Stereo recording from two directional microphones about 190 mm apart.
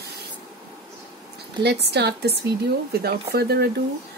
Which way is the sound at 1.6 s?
60° right (ahead or behind).